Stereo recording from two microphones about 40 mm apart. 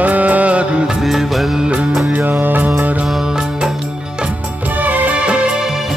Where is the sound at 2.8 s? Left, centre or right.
Right.